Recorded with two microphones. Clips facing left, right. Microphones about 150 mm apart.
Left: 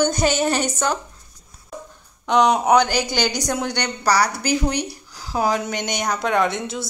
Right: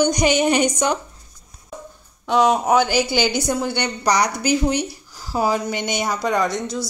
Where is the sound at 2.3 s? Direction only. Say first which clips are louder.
Even; 5° right (ahead or behind).